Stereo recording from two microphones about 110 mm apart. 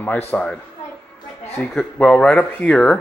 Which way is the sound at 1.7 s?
10° left (ahead or behind).